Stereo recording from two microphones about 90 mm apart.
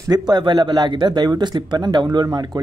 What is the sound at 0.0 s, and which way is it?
Speech, 50° right (ahead or behind).